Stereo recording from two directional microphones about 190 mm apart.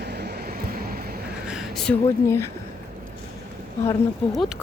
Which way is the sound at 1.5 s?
Centre (ahead or behind).